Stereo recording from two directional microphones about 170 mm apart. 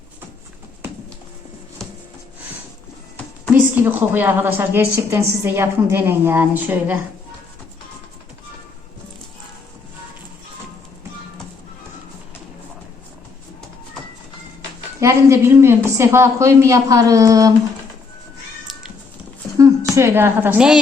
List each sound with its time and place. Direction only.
3.5 s speech: 10° right (ahead or behind)
15.0 s speech: 15° right (ahead or behind)
19.5 s a woman's voice: 15° right (ahead or behind)